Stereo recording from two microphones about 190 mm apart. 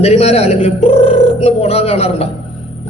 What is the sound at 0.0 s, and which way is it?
A man's voice, 35° left (ahead or behind).